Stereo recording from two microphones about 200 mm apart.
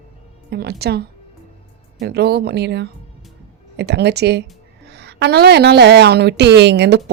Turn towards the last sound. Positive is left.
turn(degrees=-55)  # may be behind; listen again after turning